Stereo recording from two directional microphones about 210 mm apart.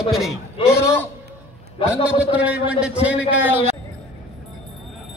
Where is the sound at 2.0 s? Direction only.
5° right (ahead or behind).